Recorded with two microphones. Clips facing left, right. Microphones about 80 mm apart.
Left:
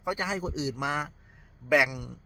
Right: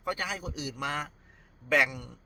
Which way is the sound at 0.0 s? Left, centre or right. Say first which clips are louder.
Left 3 dB; centre.